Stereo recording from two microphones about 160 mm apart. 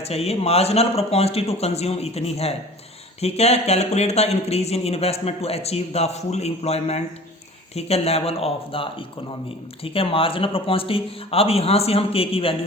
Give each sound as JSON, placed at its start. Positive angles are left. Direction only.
{"t": 0.0, "sound": "speech", "side_deg": 40}